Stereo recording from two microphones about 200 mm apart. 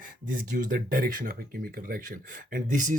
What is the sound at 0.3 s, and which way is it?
Speech, 45° right (ahead or behind).